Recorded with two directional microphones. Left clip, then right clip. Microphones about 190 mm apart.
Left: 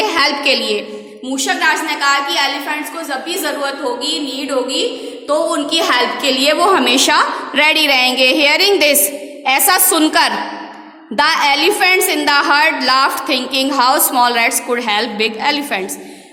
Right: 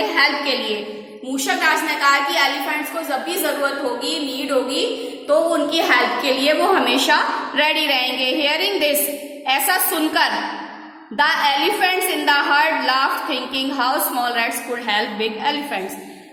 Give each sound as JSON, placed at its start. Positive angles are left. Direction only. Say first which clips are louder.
{"t": 0.0, "sound": "a sound", "louder": "left 4 dB", "side_deg": 60}
{"t": 1.5, "sound": "a woman's voice", "louder": "left 3 dB", "side_deg": 25}
{"t": 5.3, "sound": "a woman's voice", "louder": "left 2 dB", "side_deg": 50}